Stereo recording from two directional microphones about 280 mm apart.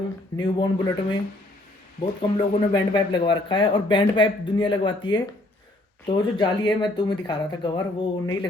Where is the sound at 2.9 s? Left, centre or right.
Centre.